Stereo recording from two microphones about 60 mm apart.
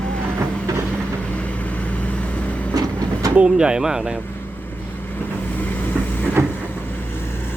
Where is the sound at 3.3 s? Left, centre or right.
Centre.